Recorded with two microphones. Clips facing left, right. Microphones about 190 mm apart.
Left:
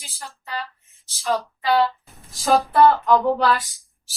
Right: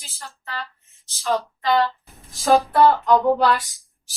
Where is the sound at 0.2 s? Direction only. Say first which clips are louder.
Left 2 dB; 15° left (ahead or behind).